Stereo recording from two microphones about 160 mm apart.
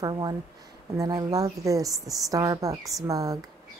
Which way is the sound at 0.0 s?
25° right (ahead or behind).